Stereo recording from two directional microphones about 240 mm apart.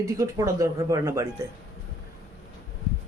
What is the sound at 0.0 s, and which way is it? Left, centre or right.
Speech, centre.